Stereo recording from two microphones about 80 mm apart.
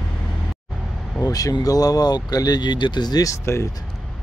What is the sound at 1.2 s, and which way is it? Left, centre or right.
Speech, left.